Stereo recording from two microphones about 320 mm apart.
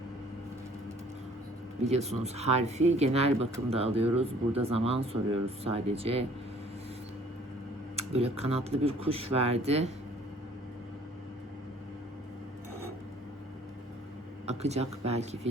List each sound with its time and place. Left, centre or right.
1.8 s speech: centre
7.9 s speech: centre
14.4 s speech: centre